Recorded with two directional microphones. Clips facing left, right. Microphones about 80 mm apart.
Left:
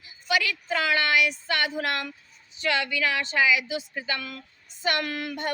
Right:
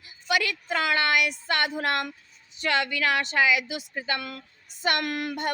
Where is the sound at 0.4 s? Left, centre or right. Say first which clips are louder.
Even; right.